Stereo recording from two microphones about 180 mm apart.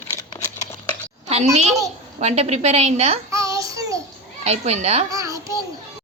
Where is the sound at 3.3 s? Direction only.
15° right (ahead or behind).